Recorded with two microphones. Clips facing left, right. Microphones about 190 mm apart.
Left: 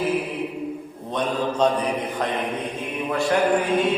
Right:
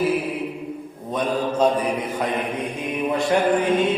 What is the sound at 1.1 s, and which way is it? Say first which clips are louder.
Mantra: right 1 dB; 10° right (ahead or behind).